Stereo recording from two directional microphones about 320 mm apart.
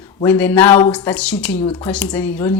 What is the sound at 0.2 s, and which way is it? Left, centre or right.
A woman's voice, centre.